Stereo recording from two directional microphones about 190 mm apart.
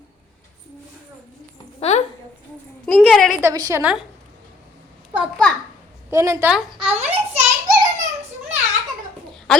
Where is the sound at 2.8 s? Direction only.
5° left (ahead or behind).